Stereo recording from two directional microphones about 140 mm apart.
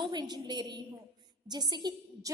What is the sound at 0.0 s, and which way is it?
A woman's voice, 30° right (ahead or behind).